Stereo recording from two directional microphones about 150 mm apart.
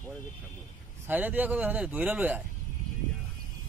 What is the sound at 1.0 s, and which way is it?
A man's voice, 10° right (ahead or behind).